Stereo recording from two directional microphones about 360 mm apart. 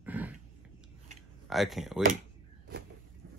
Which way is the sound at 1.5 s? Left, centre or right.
Centre.